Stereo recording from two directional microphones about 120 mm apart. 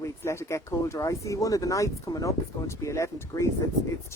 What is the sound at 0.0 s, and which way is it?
Speech, 20° left (ahead or behind).